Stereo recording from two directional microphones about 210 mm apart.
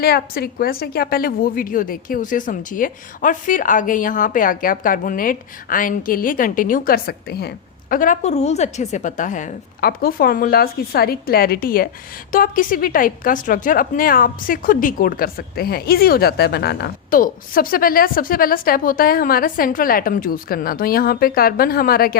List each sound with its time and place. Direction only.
0.0 s a woman's voice: 45° left (ahead or behind)